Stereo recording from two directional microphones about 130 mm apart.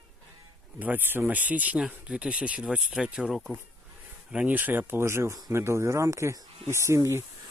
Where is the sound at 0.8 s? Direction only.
15° right (ahead or behind).